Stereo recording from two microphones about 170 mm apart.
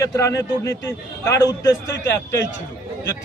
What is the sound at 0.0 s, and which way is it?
A man's voice, 20° left (ahead or behind).